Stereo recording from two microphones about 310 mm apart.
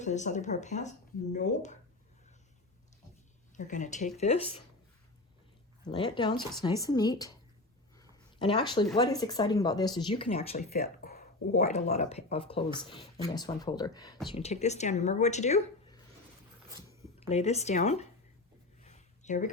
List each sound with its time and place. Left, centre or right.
0.0 s speech: left
3.5 s speech: left
5.9 s speech: centre
8.4 s speech: centre
16.6 s a sound: centre
17.2 s speech: left
18.8 s a sound: left